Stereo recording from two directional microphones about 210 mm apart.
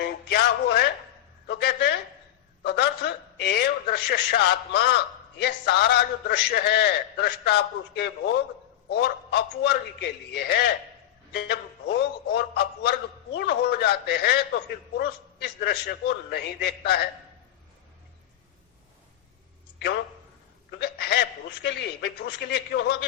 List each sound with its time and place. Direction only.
0.0 s a sound: 50° left (ahead or behind)
5.4 s a man's voice: 50° left (ahead or behind)
20.7 s a man's voice: 50° left (ahead or behind)